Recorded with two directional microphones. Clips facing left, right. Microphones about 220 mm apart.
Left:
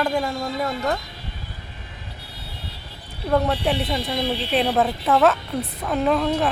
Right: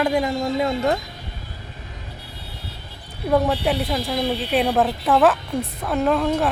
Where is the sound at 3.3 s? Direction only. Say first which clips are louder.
Right 1 dB; 5° right (ahead or behind).